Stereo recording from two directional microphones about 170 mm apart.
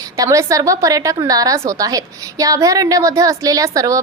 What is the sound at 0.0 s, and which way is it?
A woman's voice, 20° right (ahead or behind).